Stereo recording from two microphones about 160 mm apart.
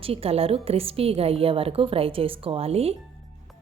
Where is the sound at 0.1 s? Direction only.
40° right (ahead or behind).